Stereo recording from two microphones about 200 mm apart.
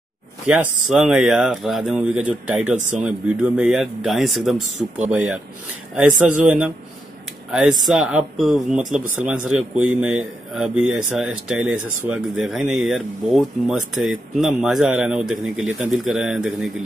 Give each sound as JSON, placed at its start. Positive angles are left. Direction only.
{"t": 0.5, "sound": "speech", "side_deg": 0}
{"t": 7.9, "sound": "speech", "side_deg": 0}
{"t": 13.7, "sound": "speech", "side_deg": -85}
{"t": 14.6, "sound": "speech", "side_deg": 0}